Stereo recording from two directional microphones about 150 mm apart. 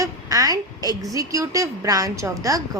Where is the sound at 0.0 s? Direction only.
25° right (ahead or behind).